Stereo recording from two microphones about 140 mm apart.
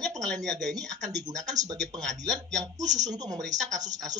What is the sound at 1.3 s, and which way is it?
Speech, 25° right (ahead or behind).